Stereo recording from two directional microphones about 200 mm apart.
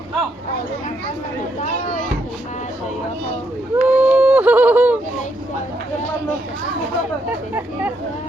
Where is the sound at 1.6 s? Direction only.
40° left (ahead or behind).